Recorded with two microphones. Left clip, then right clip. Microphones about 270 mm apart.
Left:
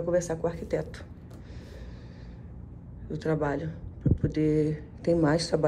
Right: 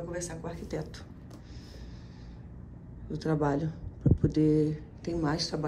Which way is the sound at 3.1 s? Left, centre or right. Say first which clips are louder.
Left 1 dB; centre.